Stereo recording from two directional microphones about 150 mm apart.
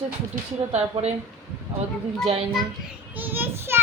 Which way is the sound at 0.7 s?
45° right (ahead or behind).